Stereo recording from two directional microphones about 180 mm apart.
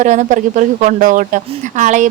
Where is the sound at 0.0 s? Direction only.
45° right (ahead or behind).